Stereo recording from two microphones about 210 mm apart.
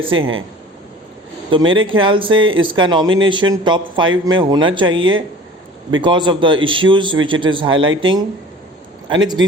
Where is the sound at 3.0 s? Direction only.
70° right (ahead or behind).